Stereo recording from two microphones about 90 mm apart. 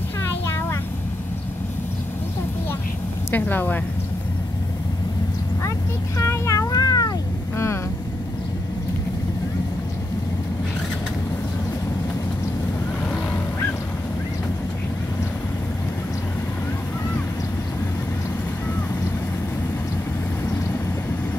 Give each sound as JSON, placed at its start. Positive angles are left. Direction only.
{"t": 0.5, "sound": "vehicle", "side_deg": 30}
{"t": 3.3, "sound": "a woman's voice", "side_deg": 20}
{"t": 6.1, "sound": "cat", "side_deg": 35}
{"t": 7.5, "sound": "vehicle", "side_deg": 30}